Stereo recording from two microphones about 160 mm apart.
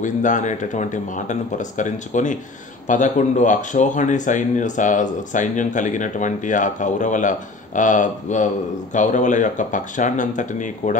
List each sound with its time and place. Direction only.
0.0 s speech: 50° left (ahead or behind)